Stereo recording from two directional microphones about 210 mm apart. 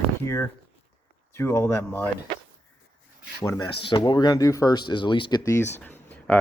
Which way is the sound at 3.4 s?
20° left (ahead or behind).